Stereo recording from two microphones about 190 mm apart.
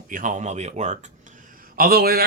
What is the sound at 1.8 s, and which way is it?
Speech, 50° right (ahead or behind).